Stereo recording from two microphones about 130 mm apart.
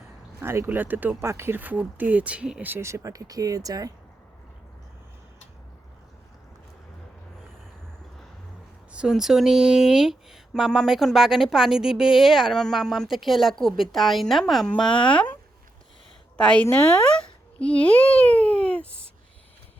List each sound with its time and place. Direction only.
0.4 s speech: 20° right (ahead or behind)
8.9 s speech: 5° right (ahead or behind); by 15.3 s 10° left (ahead or behind)
16.4 s a child's voice: 10° left (ahead or behind)